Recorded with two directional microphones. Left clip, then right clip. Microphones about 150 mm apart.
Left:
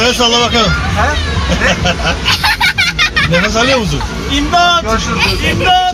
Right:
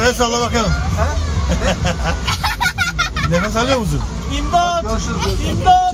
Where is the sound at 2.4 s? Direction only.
40° right (ahead or behind).